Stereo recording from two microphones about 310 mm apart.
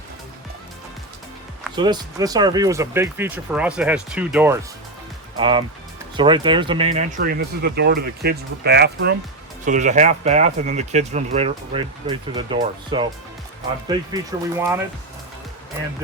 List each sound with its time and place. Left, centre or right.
1.7 s speech: centre